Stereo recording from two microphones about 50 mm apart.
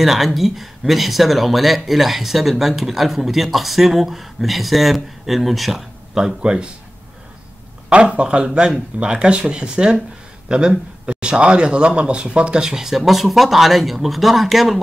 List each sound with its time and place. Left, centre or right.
0.0 s speech: centre
7.9 s speech: right; by 14.8 s centre